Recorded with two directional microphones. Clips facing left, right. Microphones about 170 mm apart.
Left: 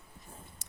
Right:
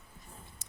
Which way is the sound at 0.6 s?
65° left (ahead or behind).